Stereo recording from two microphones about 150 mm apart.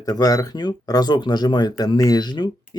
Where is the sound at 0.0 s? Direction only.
25° left (ahead or behind).